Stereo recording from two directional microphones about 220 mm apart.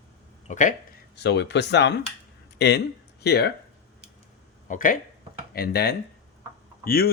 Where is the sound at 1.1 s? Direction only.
50° left (ahead or behind).